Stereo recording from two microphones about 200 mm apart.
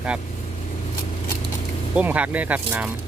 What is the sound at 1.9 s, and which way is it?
Speech, 5° right (ahead or behind).